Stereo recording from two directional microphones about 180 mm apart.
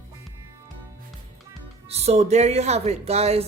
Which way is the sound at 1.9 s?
35° right (ahead or behind).